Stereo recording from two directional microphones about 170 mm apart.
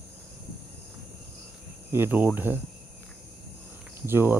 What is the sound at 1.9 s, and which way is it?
Speech, 10° right (ahead or behind).